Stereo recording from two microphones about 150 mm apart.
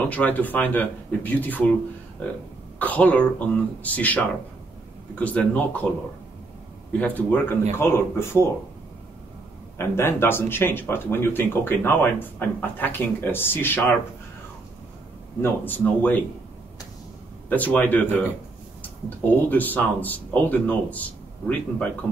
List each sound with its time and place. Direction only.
0.1 s speech: 10° left (ahead or behind)
6.9 s speech: 10° left (ahead or behind)
9.8 s speech: 15° left (ahead or behind)
15.4 s speech: 10° left (ahead or behind)
17.5 s speech: 10° left (ahead or behind)